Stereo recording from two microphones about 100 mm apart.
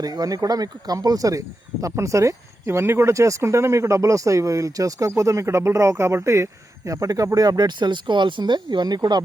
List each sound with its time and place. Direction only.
0.0 s speech: 40° right (ahead or behind)